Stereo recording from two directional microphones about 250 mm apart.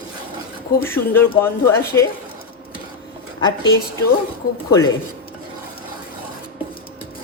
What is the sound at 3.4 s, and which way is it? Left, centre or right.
Speech, centre.